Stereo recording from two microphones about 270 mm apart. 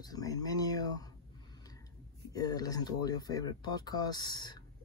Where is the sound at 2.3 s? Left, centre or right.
Centre.